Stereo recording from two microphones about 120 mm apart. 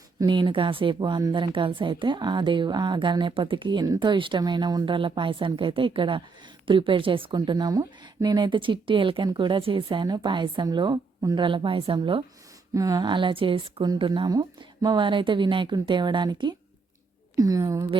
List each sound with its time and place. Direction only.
0.2 s a woman's voice: 40° right (ahead or behind)
11.4 s speech: 45° right (ahead or behind)
12.7 s speech: 30° right (ahead or behind); by 13.8 s 45° right (ahead or behind)
13.8 s a woman's voice: 35° right (ahead or behind)